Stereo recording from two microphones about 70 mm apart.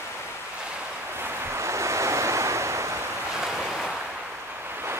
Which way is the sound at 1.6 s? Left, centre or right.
Right.